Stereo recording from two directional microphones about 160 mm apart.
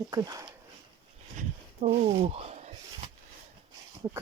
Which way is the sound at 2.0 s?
40° right (ahead or behind).